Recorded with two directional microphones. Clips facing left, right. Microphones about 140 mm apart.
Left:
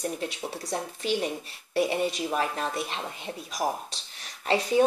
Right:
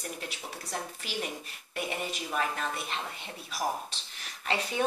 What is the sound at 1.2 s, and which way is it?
Speech, 35° left (ahead or behind).